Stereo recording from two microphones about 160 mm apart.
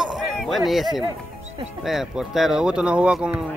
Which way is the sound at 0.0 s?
Centre (ahead or behind).